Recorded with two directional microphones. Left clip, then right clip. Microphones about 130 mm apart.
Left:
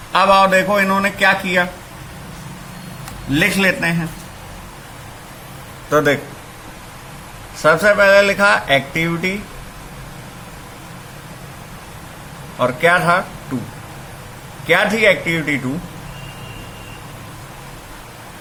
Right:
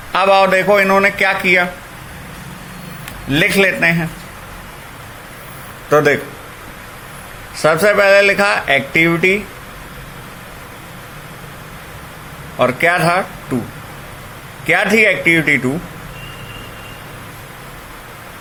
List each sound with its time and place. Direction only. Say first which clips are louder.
0.1 s speech: even; 30° right (ahead or behind)
3.3 s speech: right 3 dB; 35° right (ahead or behind)
5.9 s speech: right 3 dB; 35° right (ahead or behind)
7.5 s speech: right 1 dB; 35° right (ahead or behind)
12.5 s speech: right 1 dB; 35° right (ahead or behind)
14.7 s speech: right 1 dB; 35° right (ahead or behind)